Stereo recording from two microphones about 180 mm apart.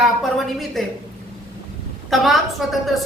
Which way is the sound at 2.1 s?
Centre (ahead or behind).